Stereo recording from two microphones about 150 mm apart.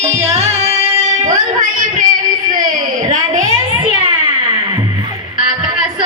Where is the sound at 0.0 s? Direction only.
45° right (ahead or behind).